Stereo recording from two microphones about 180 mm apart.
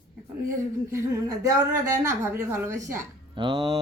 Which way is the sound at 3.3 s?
30° right (ahead or behind).